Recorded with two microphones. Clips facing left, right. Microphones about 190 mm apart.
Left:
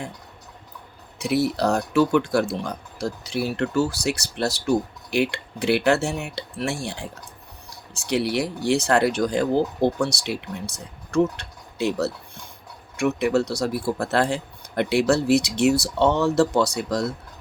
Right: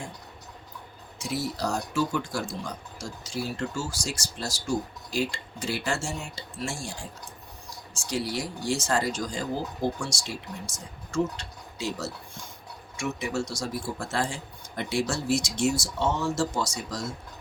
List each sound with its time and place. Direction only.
1.2 s speech: 65° left (ahead or behind)